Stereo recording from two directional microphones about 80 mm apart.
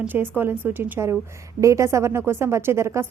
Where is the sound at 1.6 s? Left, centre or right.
Right.